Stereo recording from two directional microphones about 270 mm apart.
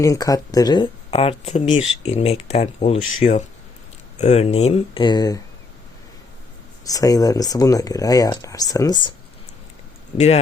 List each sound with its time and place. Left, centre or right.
0.0 s speech: centre
6.8 s speech: centre
10.2 s speech: left